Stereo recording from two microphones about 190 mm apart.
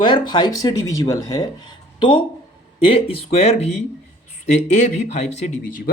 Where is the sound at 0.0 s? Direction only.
25° left (ahead or behind).